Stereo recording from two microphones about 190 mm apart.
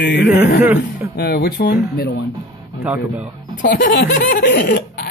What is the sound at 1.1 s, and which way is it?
Speech, 55° left (ahead or behind).